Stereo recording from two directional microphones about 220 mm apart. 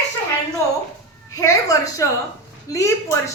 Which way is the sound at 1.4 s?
15° left (ahead or behind).